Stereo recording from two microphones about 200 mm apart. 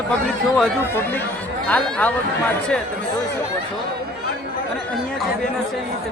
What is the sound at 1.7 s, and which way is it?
Speech, 5° left (ahead or behind).